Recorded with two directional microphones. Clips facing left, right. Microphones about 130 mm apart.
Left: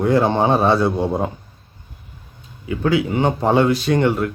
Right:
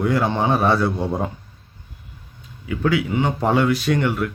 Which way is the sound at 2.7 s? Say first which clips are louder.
Left 2 dB; 30° left (ahead or behind).